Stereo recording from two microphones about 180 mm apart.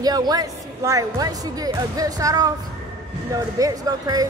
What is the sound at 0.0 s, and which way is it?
Speech, 20° right (ahead or behind).